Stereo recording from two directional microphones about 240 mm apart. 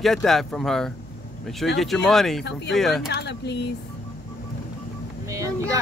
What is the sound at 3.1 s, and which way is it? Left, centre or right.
Speech, left.